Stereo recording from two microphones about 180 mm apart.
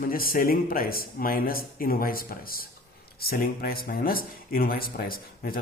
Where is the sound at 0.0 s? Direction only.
55° left (ahead or behind).